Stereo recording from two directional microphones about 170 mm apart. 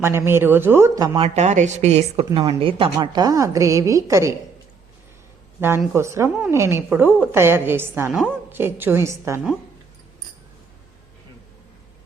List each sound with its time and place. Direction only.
0.0 s a woman's voice: 15° right (ahead or behind)
1.2 s speech: 40° right (ahead or behind); by 4.4 s 20° right (ahead or behind)
5.5 s a woman's voice: 15° right (ahead or behind)